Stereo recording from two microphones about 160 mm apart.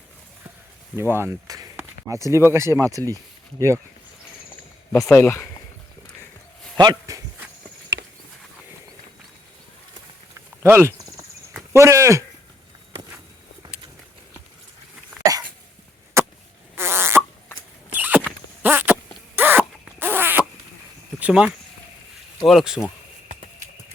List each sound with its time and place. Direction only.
0.9 s speech: 15° right (ahead or behind)
5.0 s speech: 15° left (ahead or behind)
6.7 s speech: 25° right (ahead or behind)
10.6 s a sound: 15° right (ahead or behind)
15.2 s dog: 20° right (ahead or behind)
16.2 s chop: 15° right (ahead or behind)
16.7 s fart: 15° right (ahead or behind)
17.9 s a sound: 10° right (ahead or behind)
21.2 s speech: 5° right (ahead or behind)